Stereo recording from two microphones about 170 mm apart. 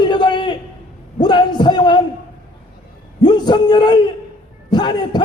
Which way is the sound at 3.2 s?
25° left (ahead or behind).